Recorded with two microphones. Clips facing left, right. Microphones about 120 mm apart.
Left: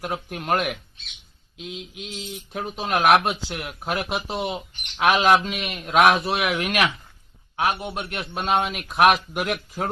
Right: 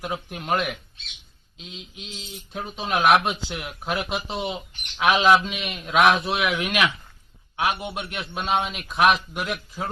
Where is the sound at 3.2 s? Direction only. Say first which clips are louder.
Left 1 dB; centre (ahead or behind).